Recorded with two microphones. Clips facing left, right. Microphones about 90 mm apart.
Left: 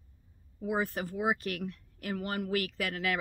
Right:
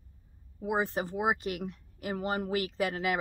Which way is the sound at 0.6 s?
25° right (ahead or behind).